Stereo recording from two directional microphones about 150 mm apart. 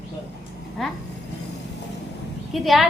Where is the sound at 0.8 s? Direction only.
Centre (ahead or behind).